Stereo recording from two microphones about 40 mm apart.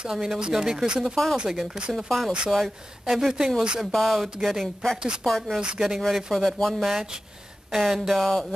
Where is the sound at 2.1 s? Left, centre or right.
Centre.